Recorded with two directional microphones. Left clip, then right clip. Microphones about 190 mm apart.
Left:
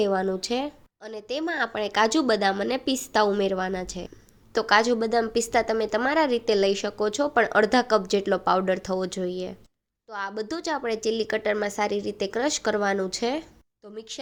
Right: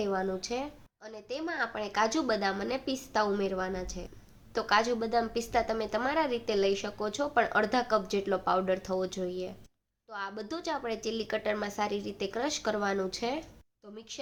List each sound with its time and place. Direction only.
0.0 s a woman's voice: 40° left (ahead or behind)